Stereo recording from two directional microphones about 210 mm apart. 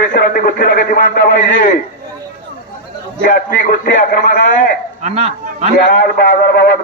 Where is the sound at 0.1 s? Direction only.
40° left (ahead or behind).